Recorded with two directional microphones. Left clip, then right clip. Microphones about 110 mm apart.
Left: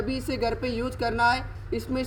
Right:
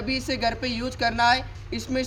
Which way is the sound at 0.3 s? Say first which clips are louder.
Right 1 dB; 40° right (ahead or behind).